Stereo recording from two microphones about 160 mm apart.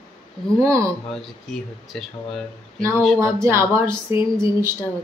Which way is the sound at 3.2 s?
20° right (ahead or behind).